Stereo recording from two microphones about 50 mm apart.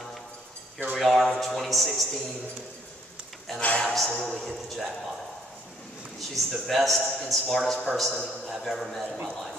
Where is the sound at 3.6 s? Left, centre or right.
Left.